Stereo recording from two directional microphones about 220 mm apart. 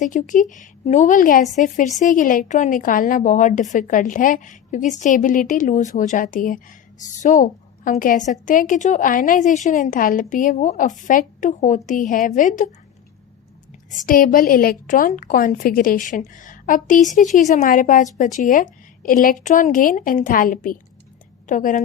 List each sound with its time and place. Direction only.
0.0 s a woman's voice: 35° left (ahead or behind)
13.9 s a woman's voice: 40° left (ahead or behind)